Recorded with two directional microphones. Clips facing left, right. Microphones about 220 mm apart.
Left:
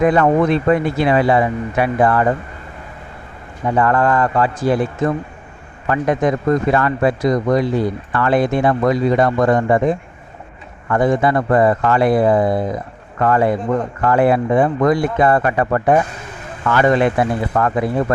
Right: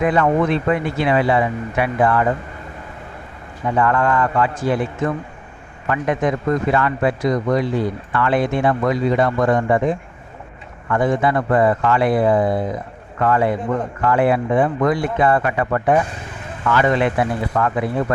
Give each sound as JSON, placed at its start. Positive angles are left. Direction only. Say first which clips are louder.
{"t": 0.0, "sound": "speech", "louder": "left 3 dB", "side_deg": 40}
{"t": 3.8, "sound": "speech", "louder": "left 2 dB", "side_deg": 40}